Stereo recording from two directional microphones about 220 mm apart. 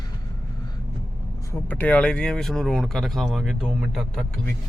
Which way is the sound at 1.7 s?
5° left (ahead or behind).